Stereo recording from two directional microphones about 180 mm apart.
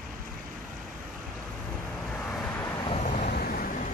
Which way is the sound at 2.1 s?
5° left (ahead or behind).